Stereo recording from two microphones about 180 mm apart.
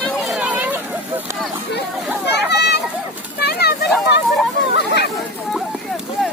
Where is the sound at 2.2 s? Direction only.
70° left (ahead or behind).